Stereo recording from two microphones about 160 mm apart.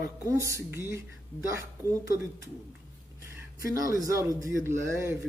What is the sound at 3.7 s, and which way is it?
Speech, 20° right (ahead or behind).